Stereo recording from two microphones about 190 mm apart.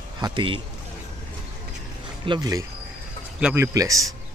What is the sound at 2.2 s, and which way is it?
Speech, 20° right (ahead or behind).